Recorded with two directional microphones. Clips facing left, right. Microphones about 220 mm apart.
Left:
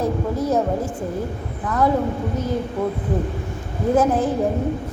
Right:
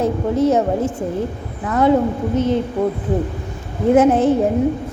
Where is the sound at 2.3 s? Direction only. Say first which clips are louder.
Right 7 dB; 25° right (ahead or behind).